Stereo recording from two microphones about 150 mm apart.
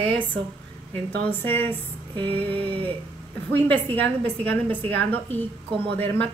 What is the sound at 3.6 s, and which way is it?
Speech, 10° left (ahead or behind).